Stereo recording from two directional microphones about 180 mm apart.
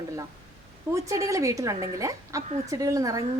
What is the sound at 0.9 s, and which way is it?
A woman's voice, 15° right (ahead or behind).